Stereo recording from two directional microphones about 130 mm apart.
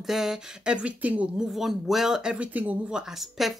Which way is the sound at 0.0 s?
5° right (ahead or behind).